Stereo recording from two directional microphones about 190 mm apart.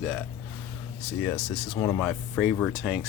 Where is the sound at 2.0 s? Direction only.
Centre (ahead or behind).